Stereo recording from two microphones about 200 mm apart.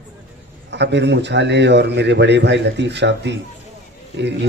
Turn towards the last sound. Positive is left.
turn(degrees=-60)  # may be behind; listen again after turning